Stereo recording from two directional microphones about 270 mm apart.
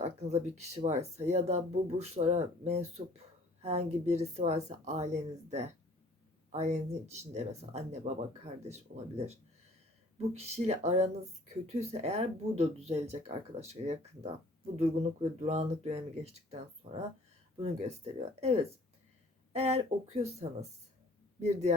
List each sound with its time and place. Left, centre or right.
0.0 s speech: right